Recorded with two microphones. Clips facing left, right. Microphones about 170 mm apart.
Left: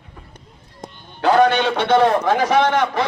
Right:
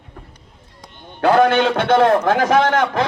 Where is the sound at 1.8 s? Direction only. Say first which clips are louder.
Even; 50° right (ahead or behind).